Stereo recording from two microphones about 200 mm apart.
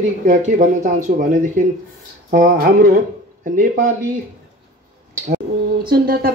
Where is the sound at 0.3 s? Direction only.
40° right (ahead or behind).